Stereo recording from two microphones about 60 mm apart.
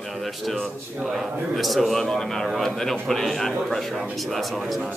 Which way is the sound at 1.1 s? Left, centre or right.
Centre.